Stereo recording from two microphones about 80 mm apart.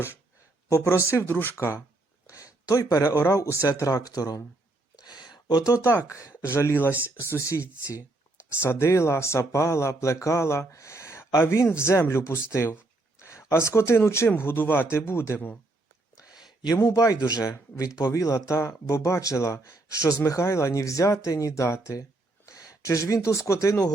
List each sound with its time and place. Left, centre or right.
0.7 s speech: left
1.3 s speech: left
2.2 s speech: left
4.9 s a sound: left
5.7 s speech: left
6.5 s speech: left
13.1 s a sound: left
13.5 s speech: left
16.1 s a sound: centre
16.7 s speech: left